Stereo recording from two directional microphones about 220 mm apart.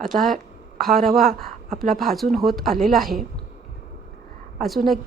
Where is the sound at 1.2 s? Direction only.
40° right (ahead or behind).